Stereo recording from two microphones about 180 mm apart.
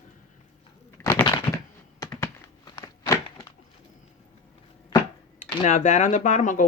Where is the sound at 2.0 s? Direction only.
20° left (ahead or behind).